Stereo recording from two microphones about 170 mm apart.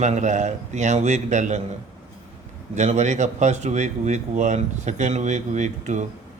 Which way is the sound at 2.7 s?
45° right (ahead or behind).